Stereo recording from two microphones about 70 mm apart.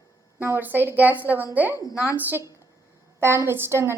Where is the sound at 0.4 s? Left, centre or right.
Right.